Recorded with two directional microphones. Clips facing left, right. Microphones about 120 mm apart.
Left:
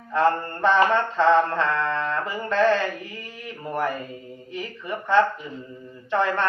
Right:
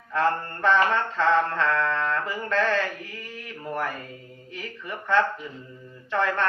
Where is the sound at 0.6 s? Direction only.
20° left (ahead or behind).